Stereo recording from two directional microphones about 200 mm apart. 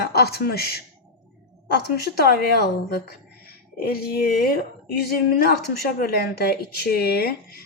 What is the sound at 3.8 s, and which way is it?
Speech, 50° left (ahead or behind).